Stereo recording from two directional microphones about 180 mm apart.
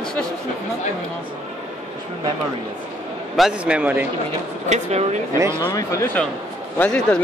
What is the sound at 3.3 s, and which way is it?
Speech, 5° right (ahead or behind).